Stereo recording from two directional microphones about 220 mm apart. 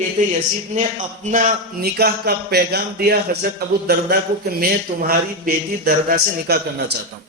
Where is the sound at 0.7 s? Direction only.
35° right (ahead or behind).